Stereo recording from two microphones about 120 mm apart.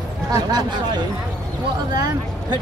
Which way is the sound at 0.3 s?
35° right (ahead or behind).